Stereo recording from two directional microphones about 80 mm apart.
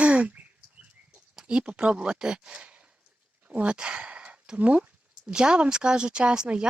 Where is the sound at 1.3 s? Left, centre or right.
Centre.